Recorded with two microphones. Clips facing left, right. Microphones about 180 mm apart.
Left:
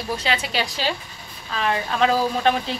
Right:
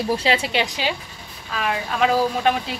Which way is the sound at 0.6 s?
15° right (ahead or behind).